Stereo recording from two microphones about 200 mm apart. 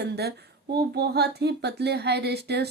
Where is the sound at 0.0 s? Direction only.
55° right (ahead or behind).